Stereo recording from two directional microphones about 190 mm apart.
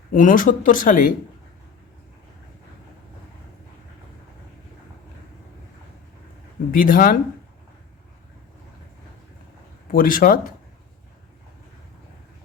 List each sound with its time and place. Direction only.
0.1 s speech: 45° left (ahead or behind)
6.7 s speech: 45° left (ahead or behind)
9.9 s speech: 45° left (ahead or behind)